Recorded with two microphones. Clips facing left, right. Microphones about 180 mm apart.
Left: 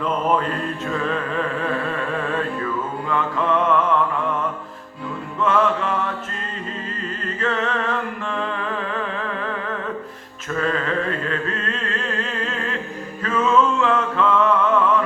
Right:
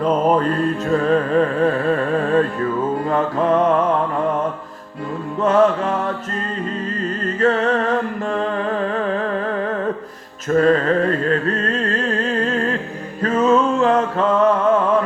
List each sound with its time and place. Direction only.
0.0 s music: 40° right (ahead or behind)
5.4 s music: 40° right (ahead or behind)
7.3 s music: 40° right (ahead or behind)
13.2 s a sound: 40° right (ahead or behind)